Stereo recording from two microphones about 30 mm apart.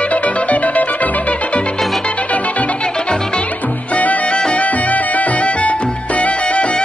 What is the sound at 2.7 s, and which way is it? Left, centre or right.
Music, left.